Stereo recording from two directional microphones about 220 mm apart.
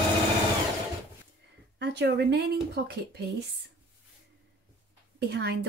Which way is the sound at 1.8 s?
50° right (ahead or behind).